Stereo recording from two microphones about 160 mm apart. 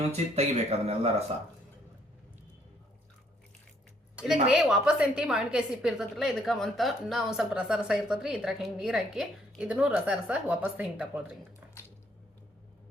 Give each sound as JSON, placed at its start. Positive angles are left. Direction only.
{"t": 0.1, "sound": "speech", "side_deg": -40}
{"t": 4.4, "sound": "a woman's voice", "side_deg": -5}